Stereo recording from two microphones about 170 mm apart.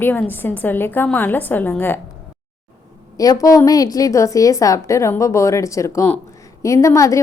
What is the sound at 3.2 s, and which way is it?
A woman's voice, 20° left (ahead or behind).